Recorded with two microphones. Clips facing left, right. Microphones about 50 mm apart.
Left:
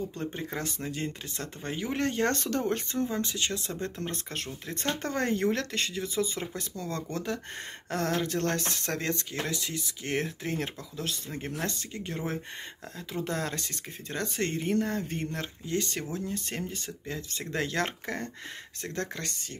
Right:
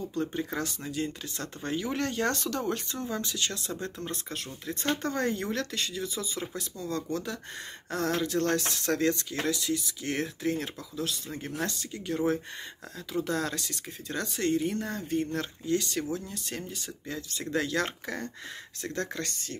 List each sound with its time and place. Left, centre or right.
0.1 s speech: left
3.8 s speech: left